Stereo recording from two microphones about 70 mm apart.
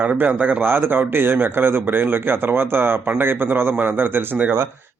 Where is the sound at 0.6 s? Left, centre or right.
Right.